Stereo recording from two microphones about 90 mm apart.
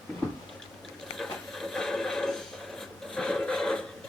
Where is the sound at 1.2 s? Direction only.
Centre (ahead or behind).